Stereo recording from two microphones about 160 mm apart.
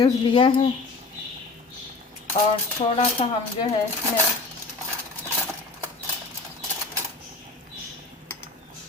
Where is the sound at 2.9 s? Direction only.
35° left (ahead or behind).